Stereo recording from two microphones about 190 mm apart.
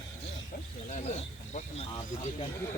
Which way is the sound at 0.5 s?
45° left (ahead or behind).